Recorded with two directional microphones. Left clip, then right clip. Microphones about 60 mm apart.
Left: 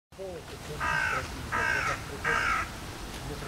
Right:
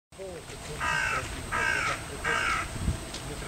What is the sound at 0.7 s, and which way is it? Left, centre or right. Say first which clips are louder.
Crow: even; right.